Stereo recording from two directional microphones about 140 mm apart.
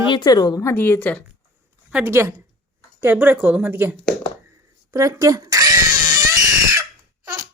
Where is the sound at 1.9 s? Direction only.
20° right (ahead or behind).